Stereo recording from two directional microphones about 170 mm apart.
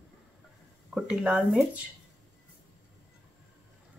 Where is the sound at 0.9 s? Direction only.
5° right (ahead or behind).